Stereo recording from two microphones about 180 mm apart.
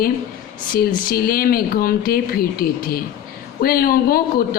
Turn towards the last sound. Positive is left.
turn(degrees=55)  # may be behind; listen again after turning